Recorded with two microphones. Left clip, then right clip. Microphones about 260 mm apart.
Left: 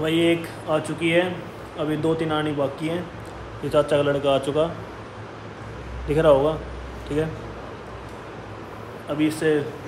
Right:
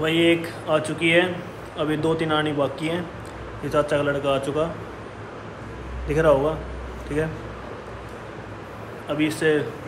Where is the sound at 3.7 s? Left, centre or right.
Centre.